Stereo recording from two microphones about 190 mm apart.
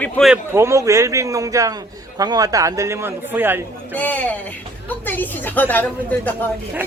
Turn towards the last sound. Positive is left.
turn(degrees=10)  # may be behind; listen again after turning